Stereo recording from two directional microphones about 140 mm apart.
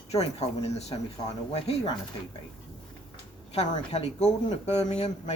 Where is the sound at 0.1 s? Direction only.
45° left (ahead or behind).